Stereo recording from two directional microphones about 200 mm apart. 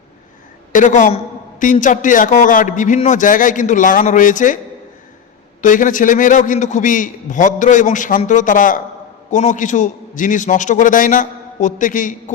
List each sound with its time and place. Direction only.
0.7 s a man's voice: 40° left (ahead or behind)
5.6 s a man's voice: 40° left (ahead or behind)